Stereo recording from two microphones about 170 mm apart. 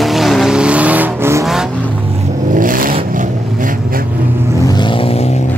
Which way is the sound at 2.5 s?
55° right (ahead or behind).